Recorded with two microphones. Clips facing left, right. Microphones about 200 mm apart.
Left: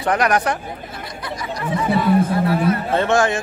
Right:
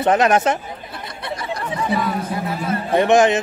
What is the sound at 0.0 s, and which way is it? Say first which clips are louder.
Speech: right 3 dB; 25° right (ahead or behind).